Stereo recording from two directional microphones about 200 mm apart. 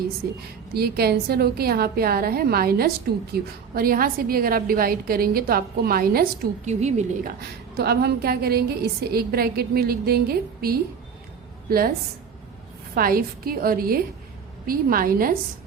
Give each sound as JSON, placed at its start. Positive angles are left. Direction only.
{"t": 0.7, "sound": "a woman's voice", "side_deg": -50}
{"t": 6.7, "sound": "a woman's voice", "side_deg": -35}
{"t": 7.8, "sound": "a woman's voice", "side_deg": -55}
{"t": 12.9, "sound": "a woman's voice", "side_deg": -45}